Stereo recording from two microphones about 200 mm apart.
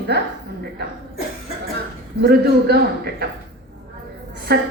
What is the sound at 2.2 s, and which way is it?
A woman's voice, 55° right (ahead or behind).